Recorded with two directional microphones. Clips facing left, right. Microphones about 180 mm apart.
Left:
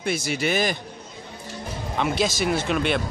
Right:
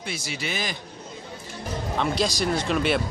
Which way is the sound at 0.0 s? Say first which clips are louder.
Left 8 dB; 50° left (ahead or behind).